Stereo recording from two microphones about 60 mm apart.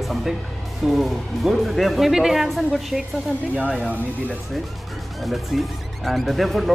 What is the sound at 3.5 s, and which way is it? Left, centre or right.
Speech, right.